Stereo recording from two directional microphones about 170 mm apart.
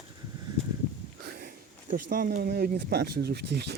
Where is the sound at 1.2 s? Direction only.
65° right (ahead or behind).